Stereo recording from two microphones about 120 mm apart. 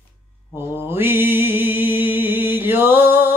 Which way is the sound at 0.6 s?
20° right (ahead or behind).